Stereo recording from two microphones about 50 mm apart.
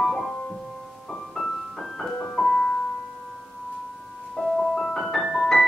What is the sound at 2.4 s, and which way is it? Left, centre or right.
Piano, centre.